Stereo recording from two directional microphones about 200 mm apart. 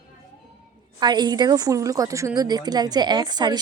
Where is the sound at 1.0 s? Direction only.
20° right (ahead or behind).